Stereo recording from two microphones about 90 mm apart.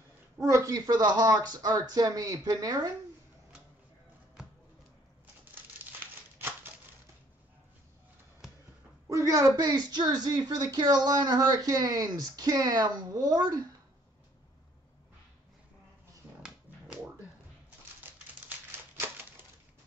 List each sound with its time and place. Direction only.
0.5 s speech: 35° right (ahead or behind)
6.3 s a sound: 25° right (ahead or behind)
9.1 s a woman's voice: 40° right (ahead or behind)
9.6 s speech: 50° right (ahead or behind)
16.4 s music: 10° right (ahead or behind)